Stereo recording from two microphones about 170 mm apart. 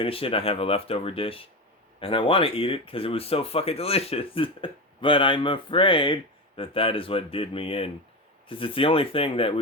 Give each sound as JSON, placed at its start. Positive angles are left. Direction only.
{"t": 0.0, "sound": "speech", "side_deg": 35}